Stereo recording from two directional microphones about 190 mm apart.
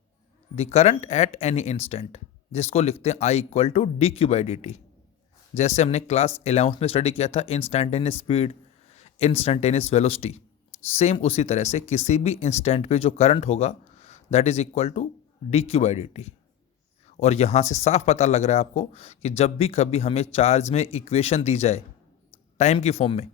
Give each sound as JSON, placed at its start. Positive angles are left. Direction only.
{"t": 0.5, "sound": "speech", "side_deg": 35}